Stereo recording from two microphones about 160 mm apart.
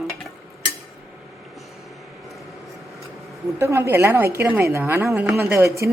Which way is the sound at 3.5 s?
15° right (ahead or behind).